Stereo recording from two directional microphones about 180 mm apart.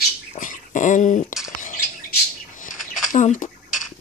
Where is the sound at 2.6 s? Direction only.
45° left (ahead or behind).